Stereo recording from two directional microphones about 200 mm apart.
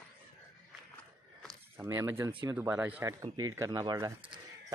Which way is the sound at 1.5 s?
10° right (ahead or behind).